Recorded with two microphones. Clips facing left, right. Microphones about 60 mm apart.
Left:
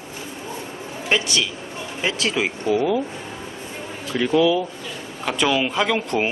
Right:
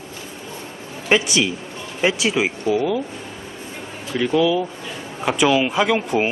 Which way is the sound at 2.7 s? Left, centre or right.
Centre.